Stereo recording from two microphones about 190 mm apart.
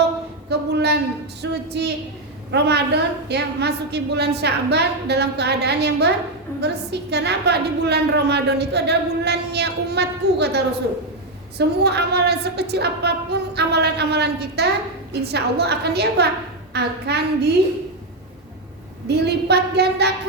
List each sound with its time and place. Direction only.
0.7 s a sound: 60° right (ahead or behind)
1.4 s music: 60° right (ahead or behind)
2.5 s a woman's voice: 60° right (ahead or behind)
19.0 s a woman's voice: 60° right (ahead or behind)